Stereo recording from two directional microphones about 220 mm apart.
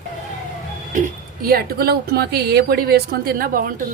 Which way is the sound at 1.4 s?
45° right (ahead or behind).